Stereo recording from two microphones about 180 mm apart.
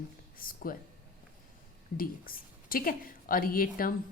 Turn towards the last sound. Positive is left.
turn(degrees=50)  # may be behind; listen again after turning